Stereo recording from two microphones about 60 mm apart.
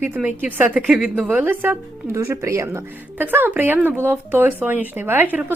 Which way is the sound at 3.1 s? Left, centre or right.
Right.